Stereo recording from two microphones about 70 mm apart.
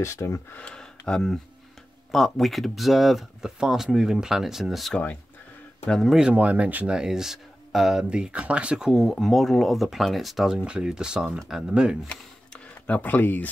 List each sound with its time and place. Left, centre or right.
0.0 s speech: left
0.6 s speech: centre
4.9 s speech: left
5.9 s speech: centre
6.1 s speech: centre
7.0 s speech: centre
12.8 s speech: left